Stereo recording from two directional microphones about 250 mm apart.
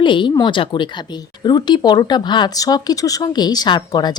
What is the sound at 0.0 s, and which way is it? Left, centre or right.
Speech, centre.